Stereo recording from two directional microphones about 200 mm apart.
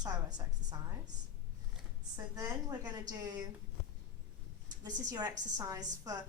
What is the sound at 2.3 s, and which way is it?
A woman's voice, 15° right (ahead or behind).